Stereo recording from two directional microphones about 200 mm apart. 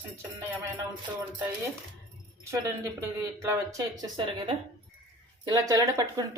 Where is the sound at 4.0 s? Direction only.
25° right (ahead or behind).